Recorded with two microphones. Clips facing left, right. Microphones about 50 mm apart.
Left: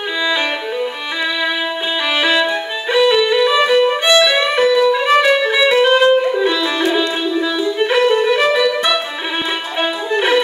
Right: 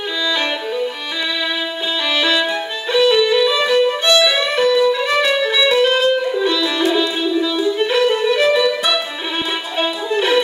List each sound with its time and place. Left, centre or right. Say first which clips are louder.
0.2 s violin: left 2 dB; left
2.1 s music: left 2 dB; centre
3.3 s violin: left 2 dB; left
4.5 s music: left 2 dB; centre
9.8 s music: left 1 dB; centre